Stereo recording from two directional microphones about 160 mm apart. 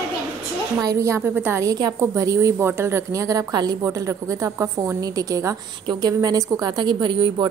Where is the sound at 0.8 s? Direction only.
20° right (ahead or behind).